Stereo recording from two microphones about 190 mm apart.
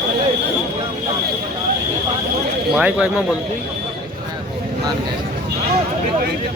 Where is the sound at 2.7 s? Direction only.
5° right (ahead or behind).